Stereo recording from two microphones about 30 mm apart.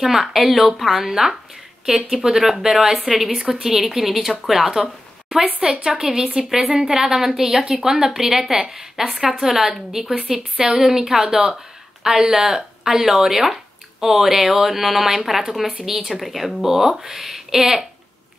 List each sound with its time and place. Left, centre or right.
0.0 s a woman's voice: centre
3.3 s a woman's voice: centre